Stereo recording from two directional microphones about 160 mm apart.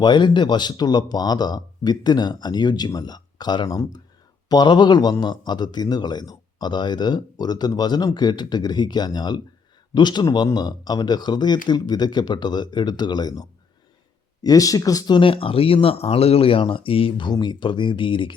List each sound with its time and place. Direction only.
0.0 s speech: 30° left (ahead or behind)